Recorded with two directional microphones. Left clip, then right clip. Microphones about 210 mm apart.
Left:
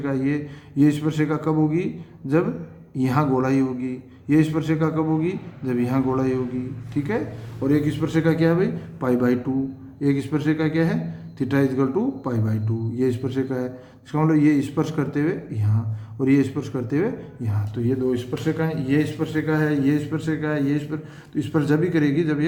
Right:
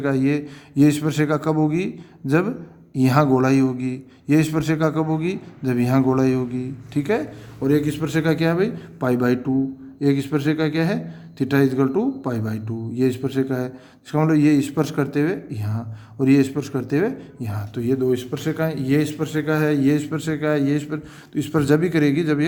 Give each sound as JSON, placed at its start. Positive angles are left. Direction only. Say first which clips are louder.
{"t": 0.0, "sound": "a man's voice", "louder": "right 4 dB", "side_deg": -50}